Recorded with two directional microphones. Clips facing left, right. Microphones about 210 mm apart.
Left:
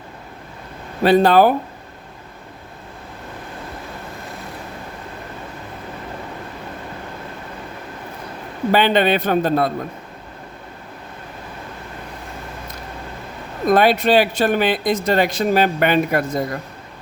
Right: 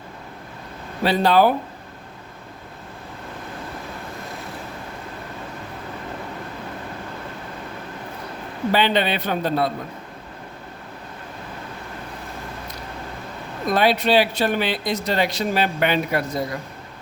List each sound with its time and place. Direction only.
1.0 s speech: 50° left (ahead or behind)
8.7 s speech: 50° left (ahead or behind)
13.7 s speech: 50° left (ahead or behind)